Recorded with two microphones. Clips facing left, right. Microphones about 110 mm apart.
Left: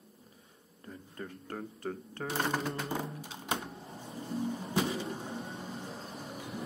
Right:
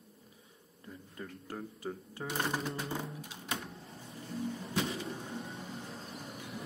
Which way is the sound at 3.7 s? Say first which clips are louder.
Left 4 dB; 25° left (ahead or behind).